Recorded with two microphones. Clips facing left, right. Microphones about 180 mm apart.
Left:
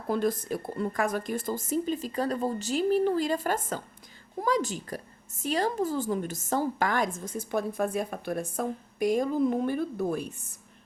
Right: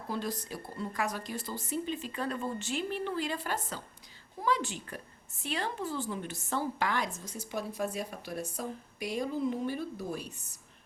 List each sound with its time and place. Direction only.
0.1 s a woman's voice: 50° left (ahead or behind)